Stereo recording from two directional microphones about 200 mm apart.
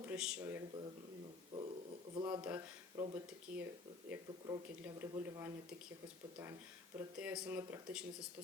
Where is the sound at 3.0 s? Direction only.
10° right (ahead or behind).